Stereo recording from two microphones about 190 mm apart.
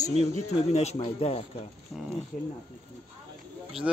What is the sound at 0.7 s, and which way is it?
Speech, 35° left (ahead or behind).